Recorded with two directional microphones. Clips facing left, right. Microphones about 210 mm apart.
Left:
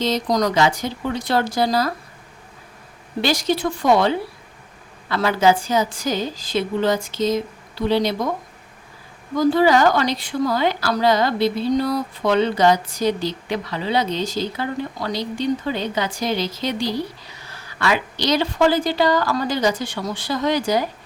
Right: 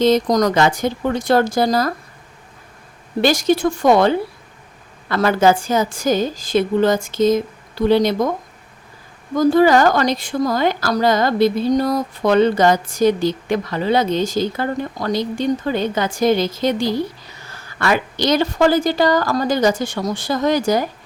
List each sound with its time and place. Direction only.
0.0 s speech: 50° right (ahead or behind)
3.2 s speech: 50° right (ahead or behind)
9.3 s speech: 45° right (ahead or behind)